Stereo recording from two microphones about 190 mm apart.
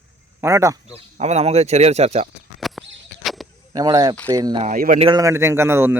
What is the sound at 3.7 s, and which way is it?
Speech, 20° right (ahead or behind).